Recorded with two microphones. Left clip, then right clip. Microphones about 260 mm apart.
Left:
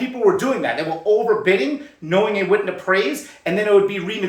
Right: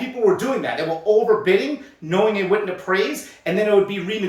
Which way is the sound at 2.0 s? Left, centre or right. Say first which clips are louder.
Left 1 dB; centre.